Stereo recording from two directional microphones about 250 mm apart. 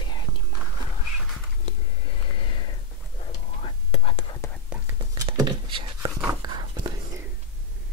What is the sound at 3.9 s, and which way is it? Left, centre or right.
Whispering, left.